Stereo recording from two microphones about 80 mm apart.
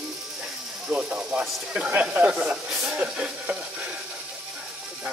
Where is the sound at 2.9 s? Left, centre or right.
Centre.